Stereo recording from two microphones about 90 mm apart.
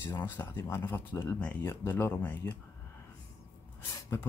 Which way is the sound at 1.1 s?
35° left (ahead or behind).